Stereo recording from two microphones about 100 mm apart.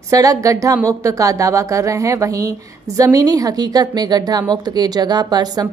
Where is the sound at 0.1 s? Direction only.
35° right (ahead or behind).